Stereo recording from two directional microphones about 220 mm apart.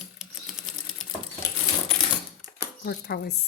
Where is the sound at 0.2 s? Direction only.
Centre (ahead or behind).